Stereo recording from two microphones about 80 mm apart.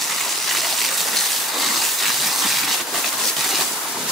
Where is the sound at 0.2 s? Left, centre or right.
Centre.